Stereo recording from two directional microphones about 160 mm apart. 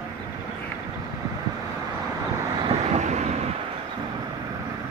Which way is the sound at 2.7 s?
45° right (ahead or behind).